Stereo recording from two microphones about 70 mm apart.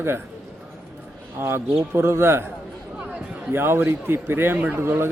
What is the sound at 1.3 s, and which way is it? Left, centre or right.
Speech, right.